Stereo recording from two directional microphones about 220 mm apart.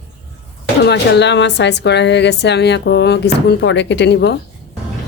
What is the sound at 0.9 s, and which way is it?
Speech, 50° left (ahead or behind).